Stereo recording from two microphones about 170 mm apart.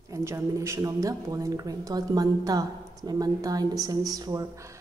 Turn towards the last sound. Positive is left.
turn(degrees=-20)  # may be behind; listen again after turning